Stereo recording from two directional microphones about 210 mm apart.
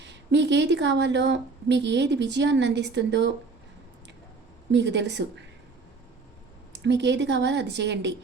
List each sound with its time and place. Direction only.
0.0 s speech: 55° right (ahead or behind)
4.7 s speech: 55° right (ahead or behind)
6.7 s speech: 55° right (ahead or behind)